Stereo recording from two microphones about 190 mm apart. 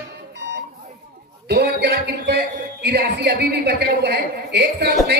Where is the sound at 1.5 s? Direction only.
60° right (ahead or behind).